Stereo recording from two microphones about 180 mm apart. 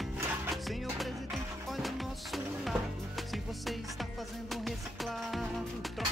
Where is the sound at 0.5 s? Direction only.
Centre (ahead or behind).